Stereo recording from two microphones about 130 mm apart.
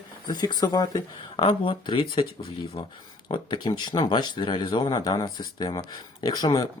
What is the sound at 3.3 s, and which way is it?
Speech, 35° left (ahead or behind).